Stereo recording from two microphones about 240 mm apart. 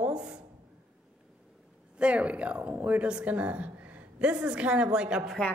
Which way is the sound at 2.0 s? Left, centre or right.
Centre.